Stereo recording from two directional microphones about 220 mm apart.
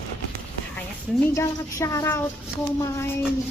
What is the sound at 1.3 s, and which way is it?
Speech, 15° left (ahead or behind).